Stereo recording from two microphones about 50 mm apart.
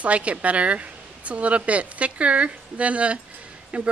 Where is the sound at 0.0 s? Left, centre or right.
Right.